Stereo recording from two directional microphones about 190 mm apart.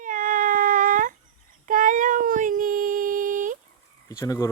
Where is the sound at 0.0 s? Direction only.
45° right (ahead or behind).